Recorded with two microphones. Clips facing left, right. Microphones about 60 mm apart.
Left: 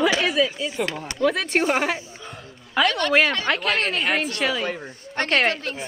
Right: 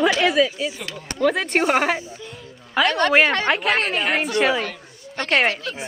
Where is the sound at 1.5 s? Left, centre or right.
Right.